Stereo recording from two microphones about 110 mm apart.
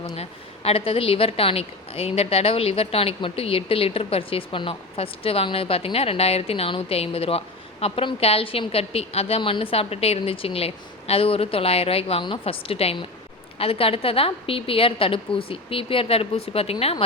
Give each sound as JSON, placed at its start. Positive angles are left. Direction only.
{"t": 0.2, "sound": "a woman's voice", "side_deg": 65}